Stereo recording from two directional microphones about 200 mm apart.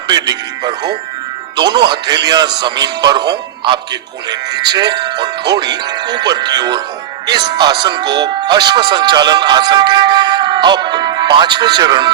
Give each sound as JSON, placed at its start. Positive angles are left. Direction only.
{"t": 0.1, "sound": "speech", "side_deg": -20}